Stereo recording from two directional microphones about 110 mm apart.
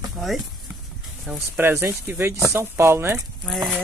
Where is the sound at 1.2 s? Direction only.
15° right (ahead or behind).